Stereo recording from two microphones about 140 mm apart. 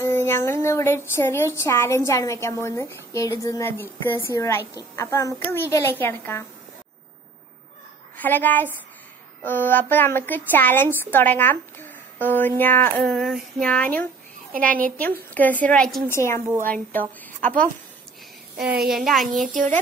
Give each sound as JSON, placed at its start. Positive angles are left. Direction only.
{"t": 0.0, "sound": "speech", "side_deg": 15}
{"t": 8.2, "sound": "a woman's voice", "side_deg": 15}
{"t": 13.1, "sound": "a woman's voice", "side_deg": 0}
{"t": 16.1, "sound": "a woman's voice", "side_deg": 20}
{"t": 17.4, "sound": "a woman's voice", "side_deg": -70}
{"t": 18.9, "sound": "child singing", "side_deg": 0}